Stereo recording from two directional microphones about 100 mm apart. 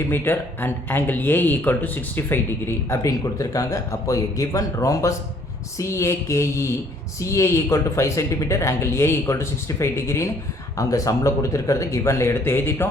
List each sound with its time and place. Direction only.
0.1 s speech: 20° left (ahead or behind)